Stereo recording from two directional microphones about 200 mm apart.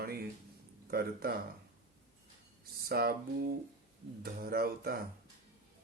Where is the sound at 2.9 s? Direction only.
50° right (ahead or behind).